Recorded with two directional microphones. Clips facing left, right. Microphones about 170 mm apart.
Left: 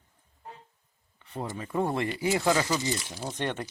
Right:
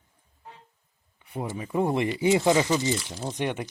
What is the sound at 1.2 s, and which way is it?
Speech, 10° right (ahead or behind).